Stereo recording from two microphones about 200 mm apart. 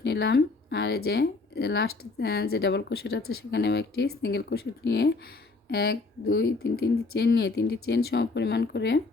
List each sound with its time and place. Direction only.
0.0 s speech: 60° left (ahead or behind)